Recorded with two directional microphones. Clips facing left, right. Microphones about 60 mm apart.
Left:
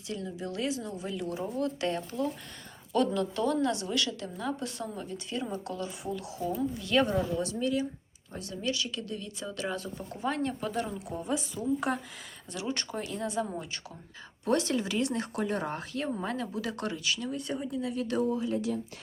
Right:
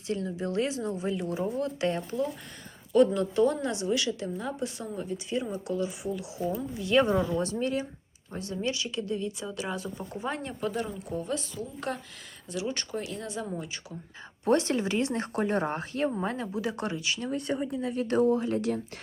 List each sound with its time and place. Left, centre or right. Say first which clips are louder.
0.1 s a woman's voice: right 5 dB; right
9.5 s a woman's voice: right 1 dB; centre
10.0 s a woman's voice: left 2 dB; centre
10.6 s speech: right 1 dB; centre
12.5 s speech: right 2 dB; centre
14.4 s speech: right 3 dB; right
17.3 s speech: right 4 dB; right
17.7 s speech: right 3 dB; right